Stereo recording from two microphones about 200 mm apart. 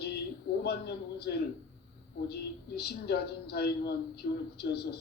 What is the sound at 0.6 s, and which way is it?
Speech, 55° left (ahead or behind).